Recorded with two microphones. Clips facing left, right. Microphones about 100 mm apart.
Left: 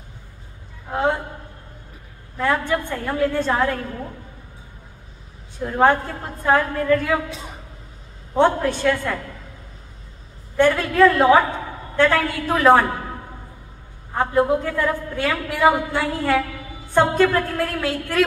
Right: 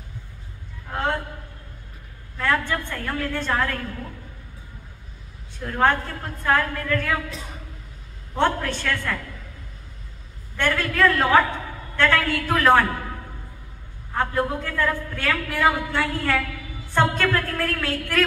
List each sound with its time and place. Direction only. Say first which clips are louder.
0.9 s a sound: left 4 dB; 15° left (ahead or behind)
2.3 s a woman's voice: left 3 dB; 15° left (ahead or behind)
5.6 s a woman's voice: left 4 dB; 15° left (ahead or behind)
8.4 s a woman's voice: left 5 dB; 15° left (ahead or behind)
10.5 s a woman's voice: left 7 dB; 15° left (ahead or behind)
14.1 s a man's voice: left 5 dB; 20° left (ahead or behind)